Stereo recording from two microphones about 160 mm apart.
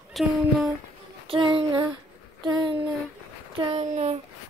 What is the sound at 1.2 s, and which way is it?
Child singing, 30° right (ahead or behind).